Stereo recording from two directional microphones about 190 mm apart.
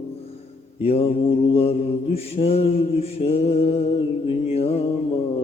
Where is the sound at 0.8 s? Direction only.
30° left (ahead or behind).